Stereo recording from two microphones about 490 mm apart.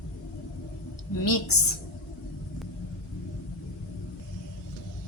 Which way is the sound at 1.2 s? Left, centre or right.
Left.